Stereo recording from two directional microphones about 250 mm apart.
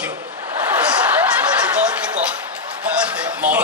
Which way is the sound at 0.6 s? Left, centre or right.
Centre.